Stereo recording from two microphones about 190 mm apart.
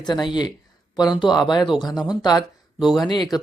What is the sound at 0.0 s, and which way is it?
Speech, 20° left (ahead or behind).